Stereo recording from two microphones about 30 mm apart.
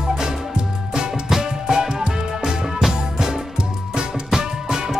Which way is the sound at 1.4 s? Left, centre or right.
Centre.